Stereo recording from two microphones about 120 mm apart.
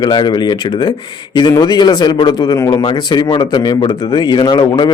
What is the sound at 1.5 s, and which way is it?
Speech, 35° left (ahead or behind).